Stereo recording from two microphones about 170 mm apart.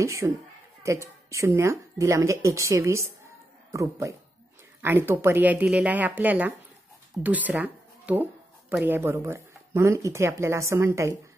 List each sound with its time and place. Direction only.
0.0 s speech: 20° right (ahead or behind)